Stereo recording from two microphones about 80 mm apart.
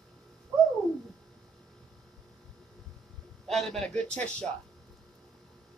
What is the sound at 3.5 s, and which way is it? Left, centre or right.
Speech, centre.